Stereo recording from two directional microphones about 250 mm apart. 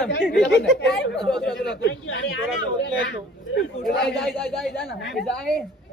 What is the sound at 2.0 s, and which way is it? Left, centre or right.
Speech, left.